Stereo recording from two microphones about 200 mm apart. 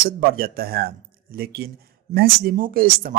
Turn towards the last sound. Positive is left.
turn(degrees=-45)  # may be behind; listen again after turning